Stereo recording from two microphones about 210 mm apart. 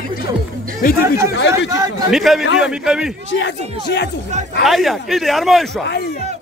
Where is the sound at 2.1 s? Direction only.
Centre (ahead or behind).